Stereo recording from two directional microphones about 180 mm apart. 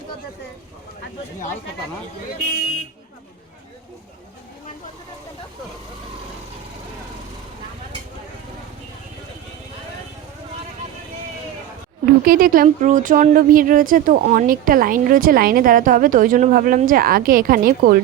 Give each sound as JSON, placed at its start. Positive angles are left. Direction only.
{"t": 12.0, "sound": "speech", "side_deg": -55}